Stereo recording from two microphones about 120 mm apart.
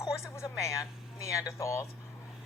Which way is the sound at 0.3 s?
25° left (ahead or behind).